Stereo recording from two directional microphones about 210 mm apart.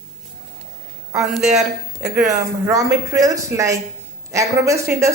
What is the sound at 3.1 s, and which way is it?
A woman's voice, 15° right (ahead or behind).